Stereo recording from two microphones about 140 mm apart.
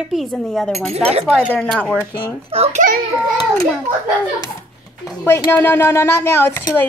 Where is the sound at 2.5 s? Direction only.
45° right (ahead or behind).